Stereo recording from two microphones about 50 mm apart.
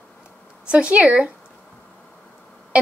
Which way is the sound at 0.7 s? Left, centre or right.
Right.